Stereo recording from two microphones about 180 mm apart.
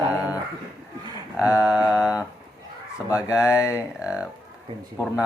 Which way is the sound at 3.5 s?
15° left (ahead or behind).